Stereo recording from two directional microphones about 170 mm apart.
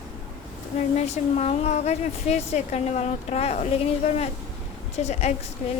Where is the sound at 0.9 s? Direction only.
40° left (ahead or behind).